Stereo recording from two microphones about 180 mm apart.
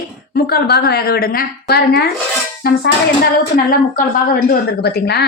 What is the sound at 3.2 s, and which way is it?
A woman's voice, 60° left (ahead or behind).